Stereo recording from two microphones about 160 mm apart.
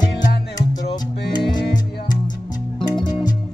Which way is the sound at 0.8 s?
25° left (ahead or behind).